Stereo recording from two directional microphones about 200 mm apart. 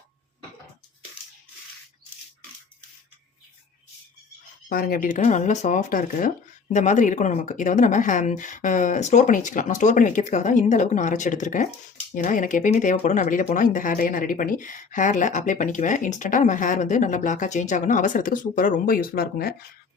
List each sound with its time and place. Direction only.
4.7 s speech: 45° left (ahead or behind)